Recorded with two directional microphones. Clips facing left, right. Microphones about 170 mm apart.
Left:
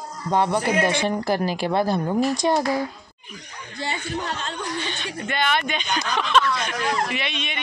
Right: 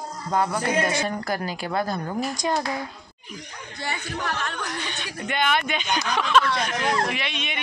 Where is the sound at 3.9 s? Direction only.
25° left (ahead or behind).